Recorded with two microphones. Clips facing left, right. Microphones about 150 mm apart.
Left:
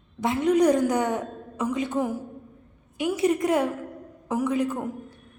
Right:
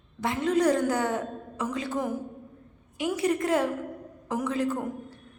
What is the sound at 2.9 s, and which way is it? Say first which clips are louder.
A woman's voice: left 3 dB; 20° left (ahead or behind).